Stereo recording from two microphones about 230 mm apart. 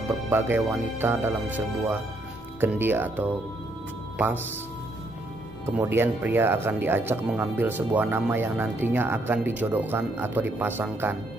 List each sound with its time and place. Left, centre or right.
0.3 s speech: centre
5.8 s speech: centre